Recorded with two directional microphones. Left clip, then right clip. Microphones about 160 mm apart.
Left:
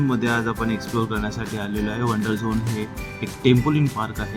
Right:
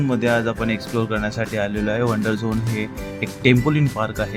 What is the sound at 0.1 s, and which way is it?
Speech, 20° right (ahead or behind).